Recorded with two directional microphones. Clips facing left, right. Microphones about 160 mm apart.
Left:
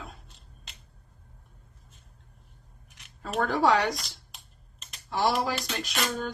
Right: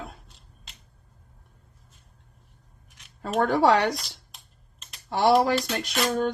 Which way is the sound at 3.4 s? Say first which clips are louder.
Right 3 dB; 65° right (ahead or behind).